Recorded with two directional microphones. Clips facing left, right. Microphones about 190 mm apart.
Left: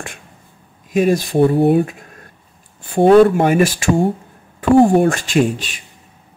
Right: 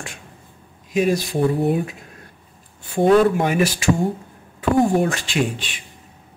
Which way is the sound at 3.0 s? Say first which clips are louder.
Left 5 dB; 55° left (ahead or behind).